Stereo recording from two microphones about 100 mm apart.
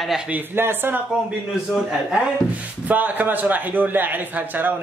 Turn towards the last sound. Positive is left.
turn(degrees=-20)  # may be behind; listen again after turning